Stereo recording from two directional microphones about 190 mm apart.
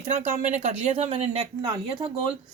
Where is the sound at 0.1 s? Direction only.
40° right (ahead or behind).